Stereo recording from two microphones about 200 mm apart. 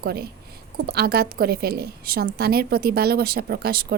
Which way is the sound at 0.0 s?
50° right (ahead or behind).